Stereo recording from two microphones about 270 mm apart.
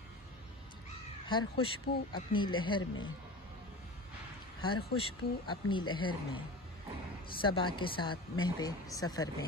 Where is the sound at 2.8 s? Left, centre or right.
Left.